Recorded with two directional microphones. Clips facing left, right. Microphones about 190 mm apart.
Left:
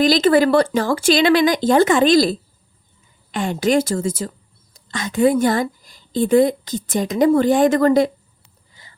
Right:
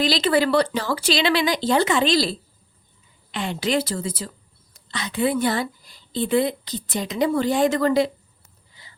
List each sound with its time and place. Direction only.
0.0 s speech: 45° left (ahead or behind)
3.3 s a woman's voice: 45° left (ahead or behind)
8.8 s a sound: 45° left (ahead or behind)